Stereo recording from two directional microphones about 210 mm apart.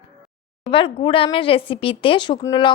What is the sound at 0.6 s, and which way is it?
Speech, 25° left (ahead or behind).